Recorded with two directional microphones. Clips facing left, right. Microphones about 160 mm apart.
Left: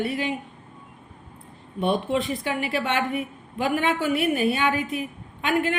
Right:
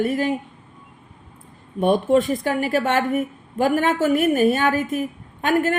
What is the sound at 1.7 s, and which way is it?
A woman's voice, 45° right (ahead or behind).